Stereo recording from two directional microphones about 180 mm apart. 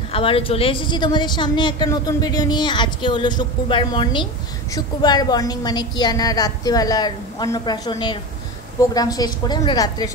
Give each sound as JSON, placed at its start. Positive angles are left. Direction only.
{"t": 0.1, "sound": "a woman's voice", "side_deg": 30}